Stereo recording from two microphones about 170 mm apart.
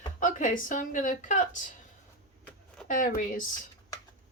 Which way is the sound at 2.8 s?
50° left (ahead or behind).